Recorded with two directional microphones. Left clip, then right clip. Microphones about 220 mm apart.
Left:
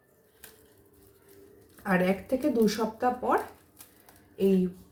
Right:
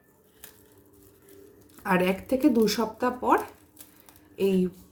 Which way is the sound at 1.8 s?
55° right (ahead or behind).